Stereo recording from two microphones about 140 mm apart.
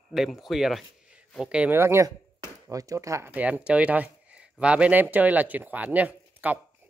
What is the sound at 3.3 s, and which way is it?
Speech, 10° right (ahead or behind).